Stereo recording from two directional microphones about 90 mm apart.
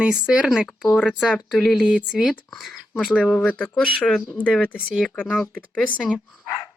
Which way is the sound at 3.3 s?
15° left (ahead or behind).